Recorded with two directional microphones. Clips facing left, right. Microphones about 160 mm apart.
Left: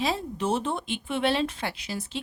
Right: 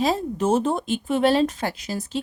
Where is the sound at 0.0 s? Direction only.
45° right (ahead or behind).